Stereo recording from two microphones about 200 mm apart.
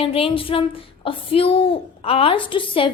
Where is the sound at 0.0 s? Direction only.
30° left (ahead or behind).